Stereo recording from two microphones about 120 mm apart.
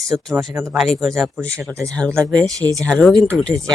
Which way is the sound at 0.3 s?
15° right (ahead or behind).